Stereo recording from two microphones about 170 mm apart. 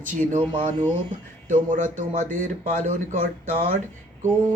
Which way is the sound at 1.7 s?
50° right (ahead or behind).